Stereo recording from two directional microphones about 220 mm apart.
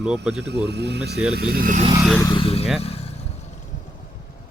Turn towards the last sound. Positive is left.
turn(degrees=25)  # may be behind; listen again after turning